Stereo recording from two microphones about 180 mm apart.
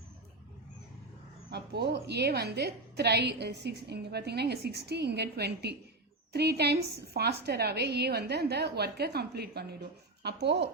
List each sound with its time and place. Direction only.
1.5 s a woman's voice: 65° right (ahead or behind)